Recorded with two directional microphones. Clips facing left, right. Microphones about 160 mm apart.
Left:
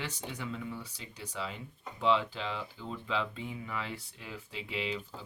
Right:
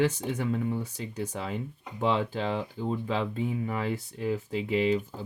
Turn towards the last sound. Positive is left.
turn(degrees=-45)  # may be behind; listen again after turning